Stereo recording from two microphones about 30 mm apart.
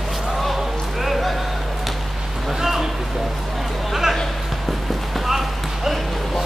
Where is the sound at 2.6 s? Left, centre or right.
Centre.